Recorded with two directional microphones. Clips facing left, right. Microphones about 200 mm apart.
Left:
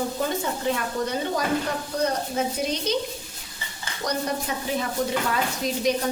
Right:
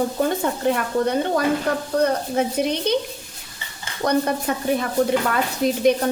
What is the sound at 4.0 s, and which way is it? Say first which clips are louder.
Speech: right 7 dB; 55° right (ahead or behind).